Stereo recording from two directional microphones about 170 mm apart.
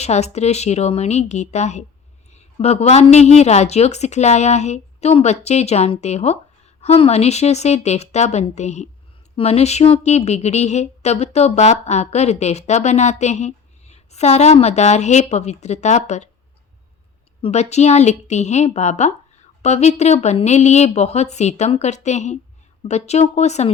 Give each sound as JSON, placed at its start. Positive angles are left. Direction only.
{"t": 0.0, "sound": "speech", "side_deg": 40}
{"t": 17.4, "sound": "speech", "side_deg": 40}